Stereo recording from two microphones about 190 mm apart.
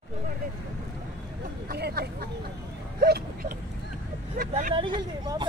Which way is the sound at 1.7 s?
55° right (ahead or behind).